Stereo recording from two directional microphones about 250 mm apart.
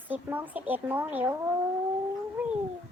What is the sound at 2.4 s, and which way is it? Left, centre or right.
Cat, centre.